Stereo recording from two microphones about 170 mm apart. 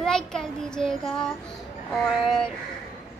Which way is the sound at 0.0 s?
5° left (ahead or behind).